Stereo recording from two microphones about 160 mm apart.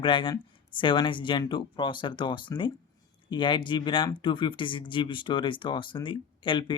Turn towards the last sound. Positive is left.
turn(degrees=30)  # may be behind; listen again after turning